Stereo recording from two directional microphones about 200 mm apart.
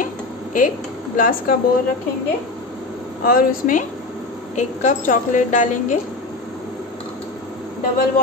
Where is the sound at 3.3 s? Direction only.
45° left (ahead or behind).